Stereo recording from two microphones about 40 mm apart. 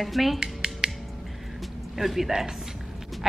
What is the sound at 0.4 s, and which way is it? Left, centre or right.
Music, centre.